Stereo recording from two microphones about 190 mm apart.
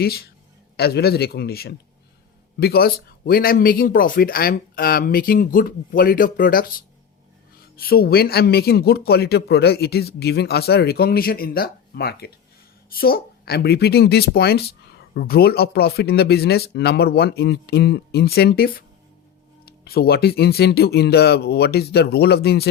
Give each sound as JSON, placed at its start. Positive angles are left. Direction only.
{"t": 0.0, "sound": "speech", "side_deg": 55}